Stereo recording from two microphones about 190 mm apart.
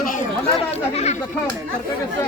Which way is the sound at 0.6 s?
35° left (ahead or behind).